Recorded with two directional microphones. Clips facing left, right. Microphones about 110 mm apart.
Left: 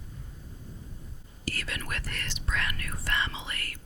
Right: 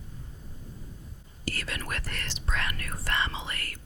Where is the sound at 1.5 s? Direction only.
35° right (ahead or behind).